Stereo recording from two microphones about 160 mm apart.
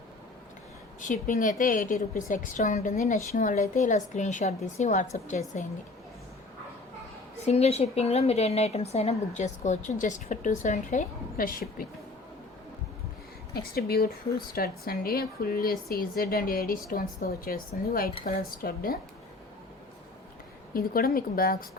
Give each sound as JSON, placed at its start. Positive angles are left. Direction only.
{"t": 1.0, "sound": "a woman's voice", "side_deg": 55}
{"t": 7.4, "sound": "speech", "side_deg": 40}
{"t": 13.5, "sound": "a woman's voice", "side_deg": 75}
{"t": 20.7, "sound": "speech", "side_deg": 65}